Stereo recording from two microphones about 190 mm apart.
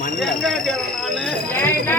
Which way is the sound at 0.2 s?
Centre (ahead or behind).